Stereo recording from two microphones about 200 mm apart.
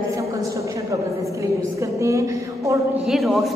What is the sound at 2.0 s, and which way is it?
Speech, 15° right (ahead or behind).